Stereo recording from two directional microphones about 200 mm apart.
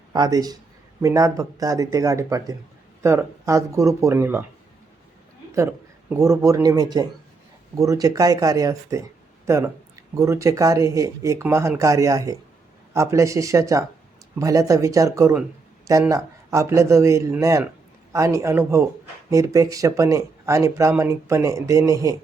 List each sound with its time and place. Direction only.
0.1 s speech: 20° right (ahead or behind)
5.5 s speech: 15° right (ahead or behind)